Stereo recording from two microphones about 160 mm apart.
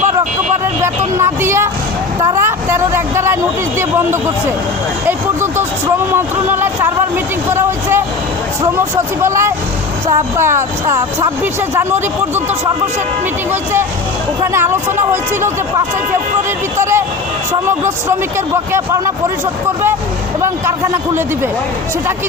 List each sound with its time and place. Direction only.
0.6 s speech: 15° right (ahead or behind)
2.3 s vehicle: 15° right (ahead or behind)
3.8 s speech: 15° right (ahead or behind)
6.1 s speech: 15° right (ahead or behind)
9.2 s speech: 15° right (ahead or behind)
11.7 s speech: 15° right (ahead or behind)
14.4 s speech: 15° right (ahead or behind)
16.7 s speech: 15° right (ahead or behind)
18.3 s speech: 15° right (ahead or behind)
20.4 s speech: 15° right (ahead or behind)